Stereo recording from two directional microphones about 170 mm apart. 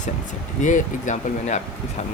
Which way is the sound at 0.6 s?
45° left (ahead or behind).